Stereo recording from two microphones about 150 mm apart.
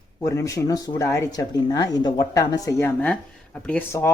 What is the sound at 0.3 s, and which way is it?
Speech, 20° left (ahead or behind).